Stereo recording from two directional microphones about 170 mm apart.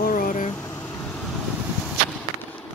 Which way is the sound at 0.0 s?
55° left (ahead or behind).